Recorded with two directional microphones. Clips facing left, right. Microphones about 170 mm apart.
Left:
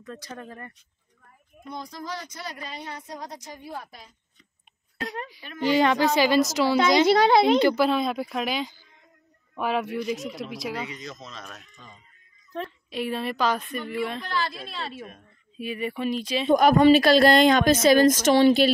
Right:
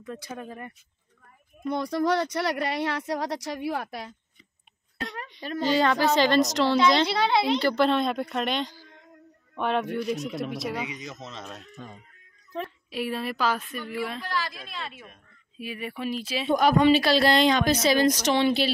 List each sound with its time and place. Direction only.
0.0 s speech: 10° right (ahead or behind)
1.7 s speech: 70° right (ahead or behind)
5.6 s speech: 15° left (ahead or behind)
7.1 s a woman's voice: 45° left (ahead or behind)
7.7 s a woman's voice: 5° left (ahead or behind)
8.7 s a sound: 75° right (ahead or behind)
9.6 s a woman's voice: 5° left (ahead or behind)
10.9 s speech: 15° right (ahead or behind)
11.7 s speech: 55° right (ahead or behind)
12.5 s a woman's voice: 5° right (ahead or behind)
14.3 s a woman's voice: 30° left (ahead or behind)
15.5 s a woman's voice: 5° right (ahead or behind)
16.4 s a woman's voice: 45° left (ahead or behind)